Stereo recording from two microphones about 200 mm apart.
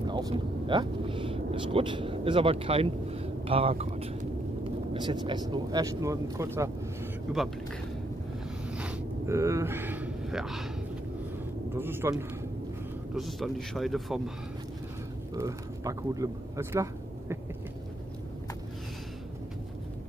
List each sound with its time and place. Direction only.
0.0 s speech: 20° right (ahead or behind); by 7.4 s 5° right (ahead or behind)
8.6 s a sound: 5° right (ahead or behind)
11.7 s speech: 10° right (ahead or behind)
13.1 s speech: centre (ahead or behind)
15.3 s speech: 15° right (ahead or behind)